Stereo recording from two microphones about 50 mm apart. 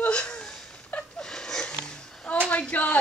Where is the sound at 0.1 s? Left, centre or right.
Centre.